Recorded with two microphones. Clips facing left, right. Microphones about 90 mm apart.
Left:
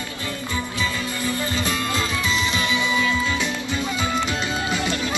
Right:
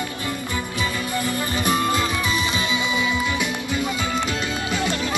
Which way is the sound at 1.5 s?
15° right (ahead or behind).